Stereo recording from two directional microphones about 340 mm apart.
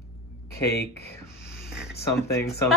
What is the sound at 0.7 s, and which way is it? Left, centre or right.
Speech, left.